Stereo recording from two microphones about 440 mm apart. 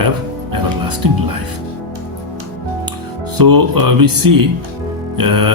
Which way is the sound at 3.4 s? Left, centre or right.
Right.